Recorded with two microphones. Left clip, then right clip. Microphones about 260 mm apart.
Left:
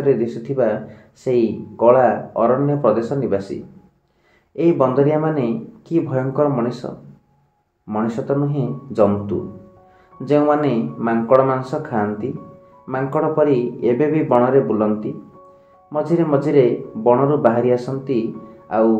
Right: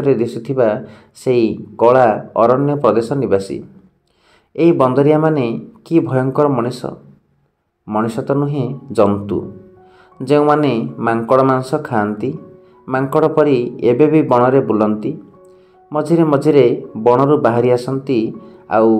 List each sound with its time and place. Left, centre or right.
0.0 s speech: right
4.6 s speech: right